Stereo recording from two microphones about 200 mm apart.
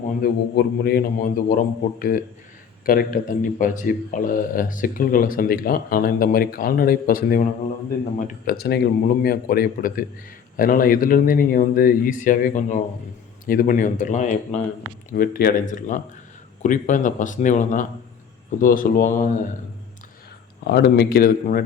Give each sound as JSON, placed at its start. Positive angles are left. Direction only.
{"t": 0.2, "sound": "speech", "side_deg": 50}
{"t": 8.4, "sound": "speech", "side_deg": 50}
{"t": 20.7, "sound": "speech", "side_deg": 55}